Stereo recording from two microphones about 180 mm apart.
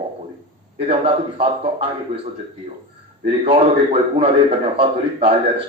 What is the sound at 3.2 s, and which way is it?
A man's voice, 35° right (ahead or behind).